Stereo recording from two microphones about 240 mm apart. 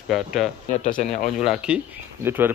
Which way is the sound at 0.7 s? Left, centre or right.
Left.